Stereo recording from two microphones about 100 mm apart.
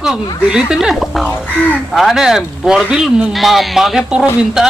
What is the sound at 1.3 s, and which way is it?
Speech, 15° left (ahead or behind).